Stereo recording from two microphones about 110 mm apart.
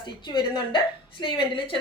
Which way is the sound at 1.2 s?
50° left (ahead or behind).